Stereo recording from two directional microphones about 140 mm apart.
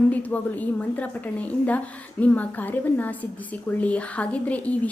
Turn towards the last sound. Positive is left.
turn(degrees=10)  # may be behind; listen again after turning